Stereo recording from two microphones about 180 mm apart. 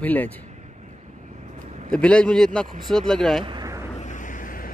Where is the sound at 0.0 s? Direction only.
10° left (ahead or behind).